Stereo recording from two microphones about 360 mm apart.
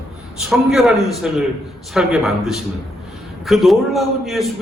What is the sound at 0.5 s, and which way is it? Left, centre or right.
A man's voice, centre.